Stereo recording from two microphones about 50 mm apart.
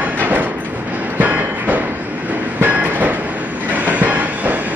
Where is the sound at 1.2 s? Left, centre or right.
Right.